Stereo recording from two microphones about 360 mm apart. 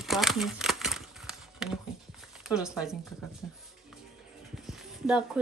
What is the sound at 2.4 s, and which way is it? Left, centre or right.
Speech, centre.